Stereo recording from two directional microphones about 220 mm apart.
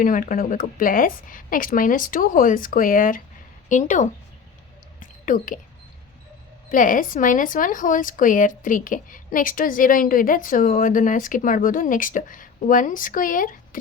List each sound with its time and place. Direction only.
0.0 s a woman's voice: 40° left (ahead or behind)
4.9 s whispering: 35° left (ahead or behind)
6.7 s a woman's voice: 35° left (ahead or behind)